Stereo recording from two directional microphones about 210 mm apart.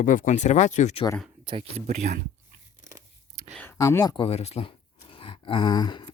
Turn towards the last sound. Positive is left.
turn(degrees=20)  # may be behind; listen again after turning